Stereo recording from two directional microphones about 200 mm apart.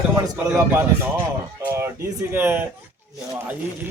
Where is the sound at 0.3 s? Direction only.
10° right (ahead or behind).